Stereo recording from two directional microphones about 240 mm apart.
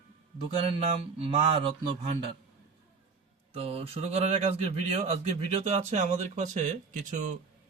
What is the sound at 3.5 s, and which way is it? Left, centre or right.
A man's voice, right.